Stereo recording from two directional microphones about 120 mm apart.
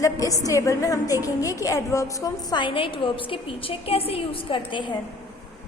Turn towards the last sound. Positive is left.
turn(degrees=40)  # may be behind; listen again after turning